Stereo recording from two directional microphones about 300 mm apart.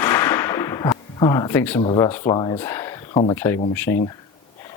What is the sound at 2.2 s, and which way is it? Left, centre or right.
Speech, centre.